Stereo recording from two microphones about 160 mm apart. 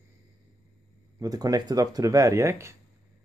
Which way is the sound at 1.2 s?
25° right (ahead or behind).